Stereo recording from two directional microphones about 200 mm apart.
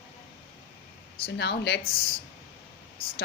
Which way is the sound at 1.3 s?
55° left (ahead or behind).